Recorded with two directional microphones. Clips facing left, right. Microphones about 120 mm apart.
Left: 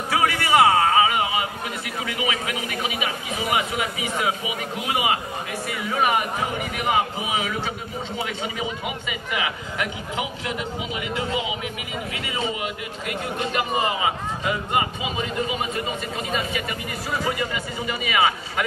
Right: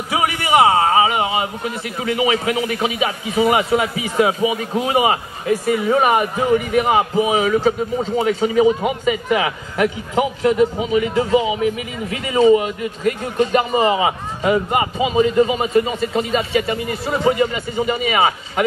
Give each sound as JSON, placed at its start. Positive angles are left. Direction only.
{"t": 0.1, "sound": "a sound", "side_deg": -20}
{"t": 2.0, "sound": "a man's voice", "side_deg": -35}
{"t": 15.0, "sound": "a man's voice", "side_deg": -35}